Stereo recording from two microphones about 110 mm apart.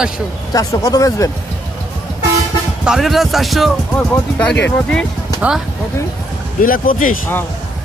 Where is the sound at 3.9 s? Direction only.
10° left (ahead or behind).